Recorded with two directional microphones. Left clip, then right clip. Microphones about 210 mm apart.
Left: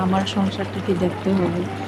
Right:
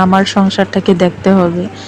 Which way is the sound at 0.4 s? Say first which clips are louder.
Right 11 dB; 35° right (ahead or behind).